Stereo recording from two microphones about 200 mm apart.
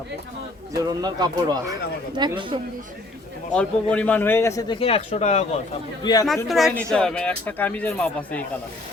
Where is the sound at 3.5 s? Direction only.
5° left (ahead or behind).